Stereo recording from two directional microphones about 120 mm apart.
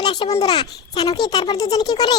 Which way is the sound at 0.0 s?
40° left (ahead or behind).